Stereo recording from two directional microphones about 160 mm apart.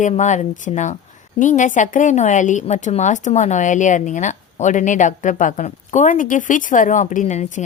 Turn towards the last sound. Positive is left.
turn(degrees=50)  # may be behind; listen again after turning